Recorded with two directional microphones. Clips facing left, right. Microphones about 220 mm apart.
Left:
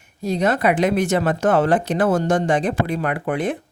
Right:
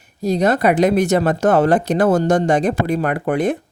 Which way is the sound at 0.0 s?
40° right (ahead or behind).